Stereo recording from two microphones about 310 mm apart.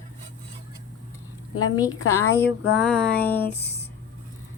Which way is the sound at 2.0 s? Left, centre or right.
Centre.